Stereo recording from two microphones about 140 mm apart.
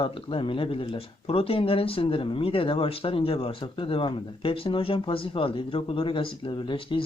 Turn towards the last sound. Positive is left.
turn(degrees=35)  # may be behind; listen again after turning